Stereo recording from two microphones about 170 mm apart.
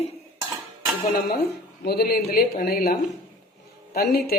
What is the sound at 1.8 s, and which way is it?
Speech, 65° left (ahead or behind).